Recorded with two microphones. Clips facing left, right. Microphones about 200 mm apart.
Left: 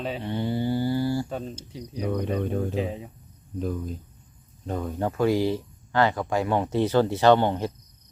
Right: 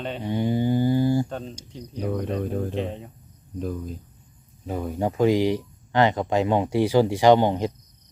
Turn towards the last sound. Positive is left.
turn(degrees=-15)  # may be behind; listen again after turning